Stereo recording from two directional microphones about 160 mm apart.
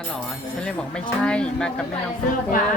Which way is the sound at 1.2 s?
5° left (ahead or behind).